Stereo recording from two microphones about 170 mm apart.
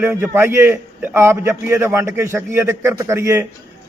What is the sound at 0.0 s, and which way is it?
A man's voice, 10° right (ahead or behind).